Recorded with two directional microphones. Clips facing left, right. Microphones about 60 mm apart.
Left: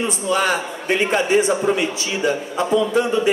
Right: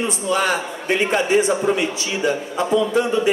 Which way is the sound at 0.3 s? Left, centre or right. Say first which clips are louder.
Left 1 dB; left.